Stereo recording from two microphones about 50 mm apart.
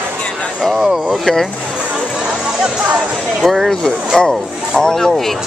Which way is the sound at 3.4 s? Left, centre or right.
Centre.